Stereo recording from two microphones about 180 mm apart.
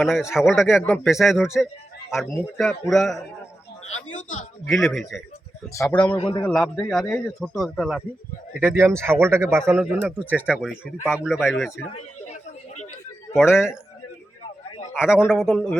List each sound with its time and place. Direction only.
0.3 s chopping: 5° right (ahead or behind)
1.5 s speech: centre (ahead or behind)
2.6 s chopping: centre (ahead or behind)
3.8 s a man's voice: 40° left (ahead or behind)
5.7 s a man's voice: 15° left (ahead or behind)
6.1 s a man's voice: 30° left (ahead or behind)
6.4 s chopping: 5° left (ahead or behind)
8.6 s speech: 10° right (ahead or behind)
9.8 s chopping: centre (ahead or behind)
11.9 s a sound: 40° left (ahead or behind)
13.3 s chopping: 5° right (ahead or behind)
14.9 s speech: 5° right (ahead or behind)
15.3 s chopping: centre (ahead or behind)